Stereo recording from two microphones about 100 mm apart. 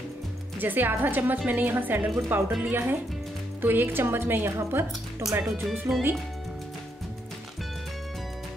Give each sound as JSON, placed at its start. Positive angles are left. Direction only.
{"t": 0.6, "sound": "a woman's voice", "side_deg": -20}
{"t": 5.4, "sound": "speech", "side_deg": 0}